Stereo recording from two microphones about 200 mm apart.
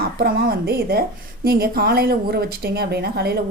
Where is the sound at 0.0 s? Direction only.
50° right (ahead or behind).